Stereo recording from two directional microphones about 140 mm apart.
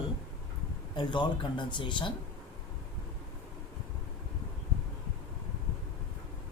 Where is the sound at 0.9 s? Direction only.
35° left (ahead or behind).